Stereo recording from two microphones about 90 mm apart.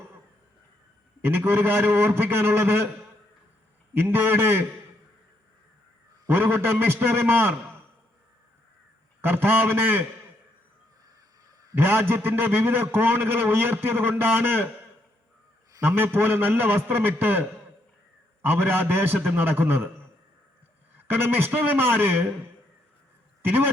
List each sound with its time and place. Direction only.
1.2 s a man's voice: 25° right (ahead or behind)
3.9 s a man's voice: 25° right (ahead or behind)
6.2 s a man's voice: 25° right (ahead or behind)
9.2 s a man's voice: 20° right (ahead or behind)
11.7 s a man's voice: 25° right (ahead or behind)
18.4 s a man's voice: 25° right (ahead or behind)
21.1 s a man's voice: 25° right (ahead or behind)
23.4 s speech: 25° right (ahead or behind)